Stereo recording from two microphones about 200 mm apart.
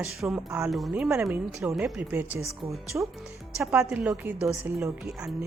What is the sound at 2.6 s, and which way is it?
Speech, 30° right (ahead or behind).